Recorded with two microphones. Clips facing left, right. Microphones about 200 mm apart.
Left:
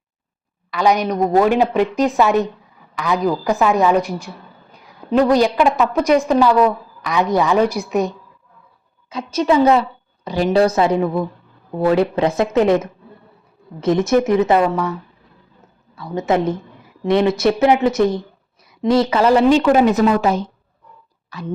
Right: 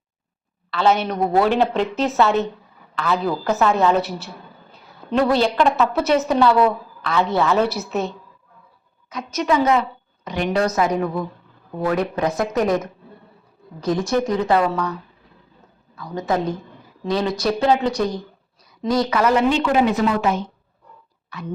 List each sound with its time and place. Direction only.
0.7 s a woman's voice: 15° left (ahead or behind)
4.7 s a sound: 15° left (ahead or behind)
5.7 s a woman's voice: 10° left (ahead or behind)
9.0 s a woman's voice: 30° left (ahead or behind)
16.0 s a woman's voice: 25° left (ahead or behind)
21.2 s a sound: 35° left (ahead or behind)